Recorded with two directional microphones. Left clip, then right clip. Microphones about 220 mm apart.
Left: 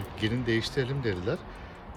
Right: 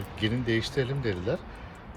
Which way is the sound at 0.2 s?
Centre (ahead or behind).